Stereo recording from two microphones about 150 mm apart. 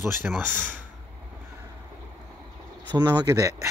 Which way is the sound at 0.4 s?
15° right (ahead or behind).